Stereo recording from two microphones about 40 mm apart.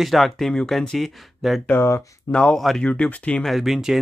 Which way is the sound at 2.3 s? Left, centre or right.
Left.